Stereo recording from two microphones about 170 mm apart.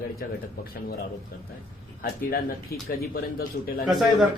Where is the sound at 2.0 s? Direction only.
65° left (ahead or behind).